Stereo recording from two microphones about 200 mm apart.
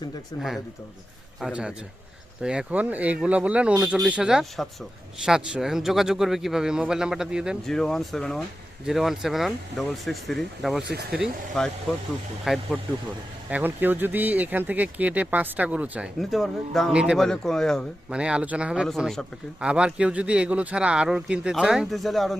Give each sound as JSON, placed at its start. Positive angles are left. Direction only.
{"t": 1.4, "sound": "speech", "side_deg": -5}
{"t": 10.8, "sound": "speech", "side_deg": -50}
{"t": 11.2, "sound": "speech", "side_deg": 0}